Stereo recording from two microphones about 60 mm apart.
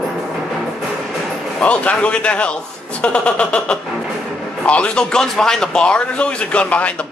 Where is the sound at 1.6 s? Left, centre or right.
Left.